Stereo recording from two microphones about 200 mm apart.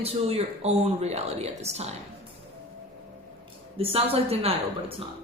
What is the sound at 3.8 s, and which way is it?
Speech, 30° right (ahead or behind).